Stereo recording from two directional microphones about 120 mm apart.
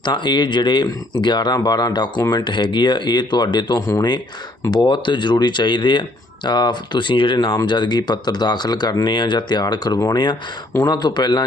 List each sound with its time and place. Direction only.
0.0 s speech: 40° left (ahead or behind)